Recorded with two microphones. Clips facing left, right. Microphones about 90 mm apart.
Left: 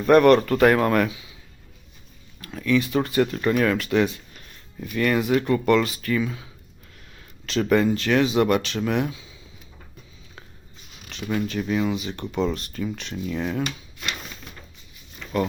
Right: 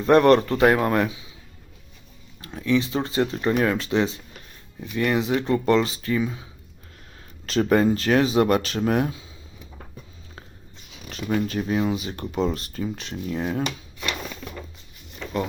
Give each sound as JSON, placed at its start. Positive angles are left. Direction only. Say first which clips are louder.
{"t": 0.0, "sound": "speech", "louder": "left 1 dB", "side_deg": -30}
{"t": 2.4, "sound": "speech", "louder": "even", "side_deg": -25}
{"t": 7.2, "sound": "speech", "louder": "right 2 dB", "side_deg": -35}
{"t": 11.3, "sound": "speech", "louder": "right 1 dB", "side_deg": -35}